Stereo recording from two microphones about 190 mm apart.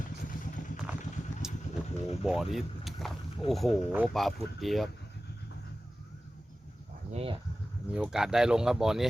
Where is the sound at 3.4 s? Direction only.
30° left (ahead or behind).